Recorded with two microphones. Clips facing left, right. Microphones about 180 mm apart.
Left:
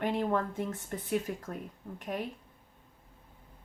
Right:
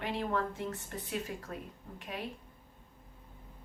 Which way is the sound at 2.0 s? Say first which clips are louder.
Left 6 dB; 50° left (ahead or behind).